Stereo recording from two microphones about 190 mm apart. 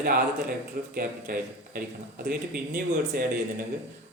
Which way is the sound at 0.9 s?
50° right (ahead or behind).